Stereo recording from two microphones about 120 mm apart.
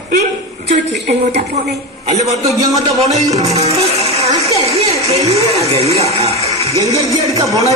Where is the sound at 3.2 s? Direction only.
30° right (ahead or behind).